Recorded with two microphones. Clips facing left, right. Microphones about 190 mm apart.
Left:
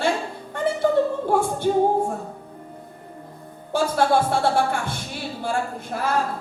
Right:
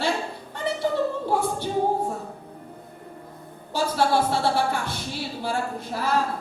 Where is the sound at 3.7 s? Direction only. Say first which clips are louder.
Left 3 dB; 55° left (ahead or behind).